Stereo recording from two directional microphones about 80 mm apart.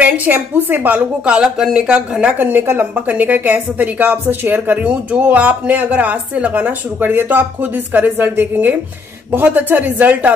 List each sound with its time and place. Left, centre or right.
0.0 s a woman's voice: right
2.3 s speech: right